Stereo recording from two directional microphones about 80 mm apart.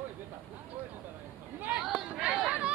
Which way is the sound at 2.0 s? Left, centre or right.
Centre.